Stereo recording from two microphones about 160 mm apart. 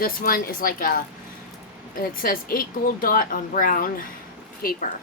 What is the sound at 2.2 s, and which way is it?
Speech, 65° left (ahead or behind).